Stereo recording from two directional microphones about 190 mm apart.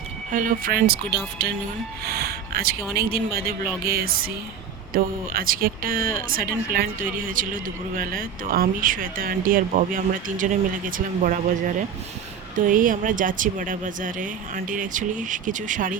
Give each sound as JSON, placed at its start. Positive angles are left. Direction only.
{"t": 0.3, "sound": "speech", "side_deg": -45}